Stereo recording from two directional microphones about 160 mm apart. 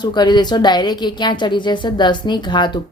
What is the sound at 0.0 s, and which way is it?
A woman's voice, 25° left (ahead or behind).